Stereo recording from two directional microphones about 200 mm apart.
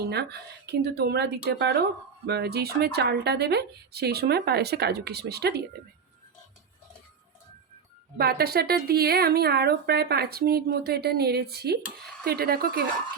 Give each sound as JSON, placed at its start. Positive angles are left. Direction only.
{"t": 0.0, "sound": "a woman's voice", "side_deg": -55}
{"t": 8.2, "sound": "a woman's voice", "side_deg": -50}